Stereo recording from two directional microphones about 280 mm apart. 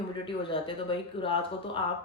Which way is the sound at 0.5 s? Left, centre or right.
Centre.